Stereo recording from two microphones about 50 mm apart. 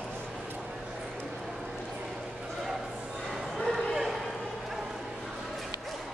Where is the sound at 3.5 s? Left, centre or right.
Centre.